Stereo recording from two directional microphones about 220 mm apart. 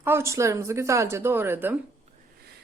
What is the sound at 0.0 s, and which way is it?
Speech, 10° right (ahead or behind).